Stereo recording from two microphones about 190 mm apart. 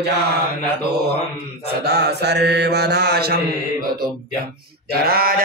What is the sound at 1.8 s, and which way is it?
Mantra, 60° right (ahead or behind).